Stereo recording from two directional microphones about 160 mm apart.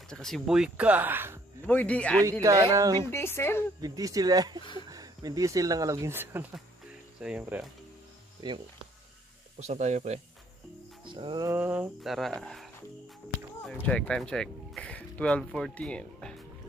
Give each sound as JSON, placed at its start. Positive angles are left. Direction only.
{"t": 0.1, "sound": "speech", "side_deg": 5}
{"t": 1.7, "sound": "speech", "side_deg": 10}
{"t": 2.4, "sound": "speech", "side_deg": -20}
{"t": 3.1, "sound": "speech", "side_deg": 15}
{"t": 3.8, "sound": "speech", "side_deg": -20}
{"t": 8.4, "sound": "speech", "side_deg": -30}
{"t": 9.6, "sound": "speech", "side_deg": -45}
{"t": 11.1, "sound": "music", "side_deg": -30}
{"t": 11.4, "sound": "speech", "side_deg": -10}
{"t": 13.8, "sound": "speech", "side_deg": 5}